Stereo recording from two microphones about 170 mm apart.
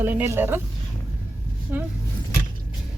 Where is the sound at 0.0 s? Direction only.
10° right (ahead or behind).